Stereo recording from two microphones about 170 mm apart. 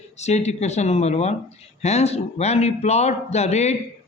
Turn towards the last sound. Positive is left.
turn(degrees=40)  # may be behind; listen again after turning